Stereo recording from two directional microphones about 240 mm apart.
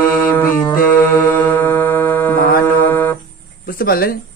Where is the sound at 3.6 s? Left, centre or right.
Left.